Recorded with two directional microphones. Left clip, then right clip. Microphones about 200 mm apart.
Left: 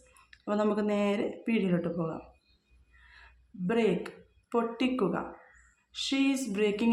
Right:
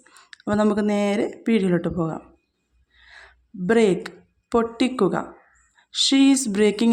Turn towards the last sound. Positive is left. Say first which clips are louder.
# right 9 dB
turn(degrees=-40)  # may be behind; listen again after turning